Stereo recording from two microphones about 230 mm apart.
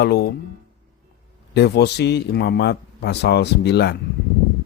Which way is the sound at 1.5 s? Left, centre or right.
Left.